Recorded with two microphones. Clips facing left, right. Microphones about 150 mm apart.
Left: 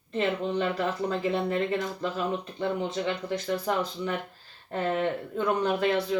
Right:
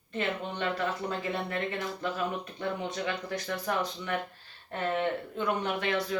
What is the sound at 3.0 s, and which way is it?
Speech, 25° left (ahead or behind).